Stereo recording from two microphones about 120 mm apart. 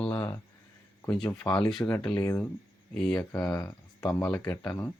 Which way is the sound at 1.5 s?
10° left (ahead or behind).